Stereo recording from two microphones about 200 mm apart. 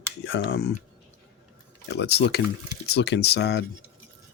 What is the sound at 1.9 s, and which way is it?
Speech, 55° left (ahead or behind).